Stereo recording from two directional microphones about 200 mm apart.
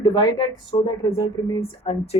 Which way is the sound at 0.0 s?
20° left (ahead or behind).